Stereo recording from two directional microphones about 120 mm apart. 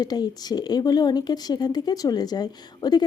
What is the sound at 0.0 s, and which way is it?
Speech, 35° left (ahead or behind).